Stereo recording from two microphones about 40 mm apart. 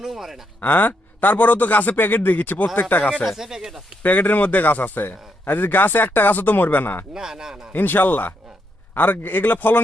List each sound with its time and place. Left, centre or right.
0.0 s speech: centre
0.6 s a man's voice: left
3.0 s speech: left
3.2 s speech: centre
4.0 s a man's voice: left
7.1 s speech: centre
7.7 s a man's voice: left